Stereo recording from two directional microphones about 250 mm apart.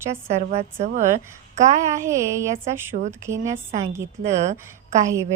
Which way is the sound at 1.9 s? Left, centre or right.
Centre.